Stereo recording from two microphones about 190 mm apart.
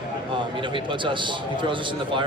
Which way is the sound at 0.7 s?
25° right (ahead or behind).